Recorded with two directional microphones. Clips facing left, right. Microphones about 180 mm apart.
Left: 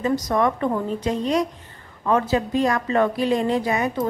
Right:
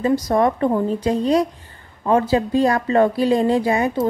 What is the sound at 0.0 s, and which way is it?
A woman's voice, 30° right (ahead or behind).